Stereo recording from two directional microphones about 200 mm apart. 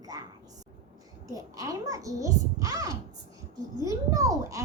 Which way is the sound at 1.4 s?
15° right (ahead or behind).